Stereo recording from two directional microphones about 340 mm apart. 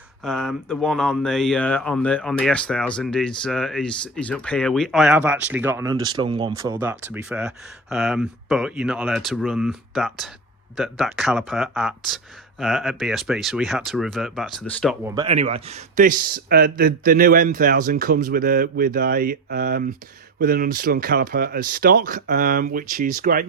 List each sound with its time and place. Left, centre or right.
0.2 s speech: centre
15.0 s speech: centre